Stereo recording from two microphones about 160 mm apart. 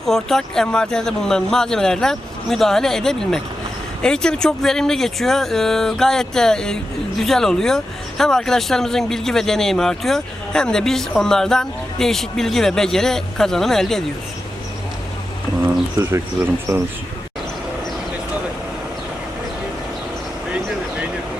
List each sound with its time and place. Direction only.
0.0 s speech: centre (ahead or behind)
16.7 s speech: 20° right (ahead or behind)
20.5 s vehicle: 10° right (ahead or behind)